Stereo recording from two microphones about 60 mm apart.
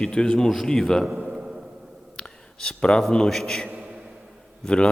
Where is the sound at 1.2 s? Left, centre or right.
Centre.